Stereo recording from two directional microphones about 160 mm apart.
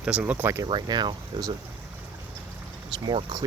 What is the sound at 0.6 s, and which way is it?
Speech, 25° right (ahead or behind).